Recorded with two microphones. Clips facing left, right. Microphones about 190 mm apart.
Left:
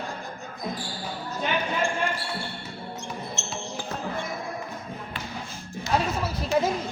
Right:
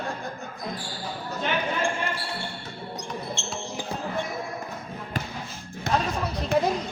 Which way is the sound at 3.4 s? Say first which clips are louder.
Right 1 dB; 30° right (ahead or behind).